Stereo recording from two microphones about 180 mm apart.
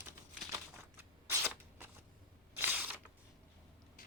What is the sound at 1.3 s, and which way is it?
Shuffling cards, 10° right (ahead or behind).